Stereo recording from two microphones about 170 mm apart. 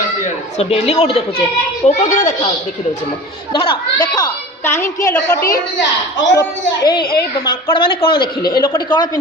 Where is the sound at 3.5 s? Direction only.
30° left (ahead or behind).